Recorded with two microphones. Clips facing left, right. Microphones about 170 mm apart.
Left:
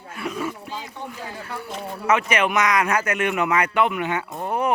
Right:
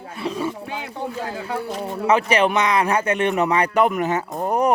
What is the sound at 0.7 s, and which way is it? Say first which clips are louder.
Speech: right 5 dB; 70° right (ahead or behind).